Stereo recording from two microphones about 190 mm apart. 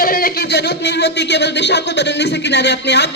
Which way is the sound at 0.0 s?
50° left (ahead or behind).